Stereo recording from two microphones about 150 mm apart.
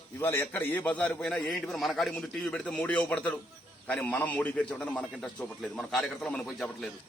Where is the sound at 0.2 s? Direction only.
15° left (ahead or behind).